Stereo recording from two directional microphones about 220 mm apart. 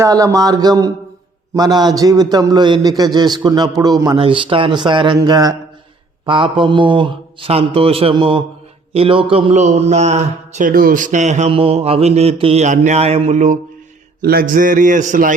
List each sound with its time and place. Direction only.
0.0 s a man's voice: 15° right (ahead or behind); by 15.4 s 35° right (ahead or behind)